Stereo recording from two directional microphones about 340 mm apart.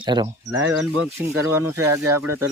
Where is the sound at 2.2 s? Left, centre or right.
Right.